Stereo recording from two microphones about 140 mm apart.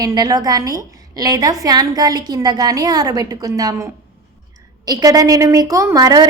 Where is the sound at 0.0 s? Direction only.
25° right (ahead or behind).